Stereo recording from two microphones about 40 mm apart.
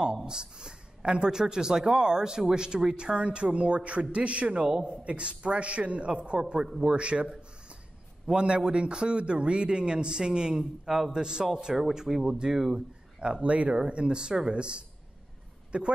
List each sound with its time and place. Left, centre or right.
0.3 s speech: centre
4.6 s speech: right
8.4 s speech: right
10.9 s speech: centre
11.1 s speech: centre